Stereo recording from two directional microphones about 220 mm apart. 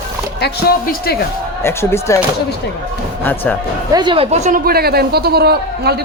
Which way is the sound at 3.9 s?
20° right (ahead or behind).